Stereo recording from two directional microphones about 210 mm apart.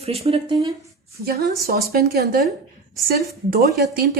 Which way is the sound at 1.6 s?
45° right (ahead or behind).